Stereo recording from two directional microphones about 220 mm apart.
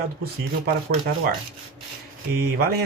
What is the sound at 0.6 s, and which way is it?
Speech, 45° right (ahead or behind).